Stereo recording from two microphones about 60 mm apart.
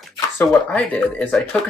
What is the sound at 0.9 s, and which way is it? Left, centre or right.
Speech, left.